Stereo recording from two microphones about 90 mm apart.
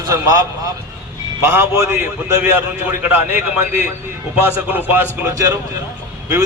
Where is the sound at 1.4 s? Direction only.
25° right (ahead or behind).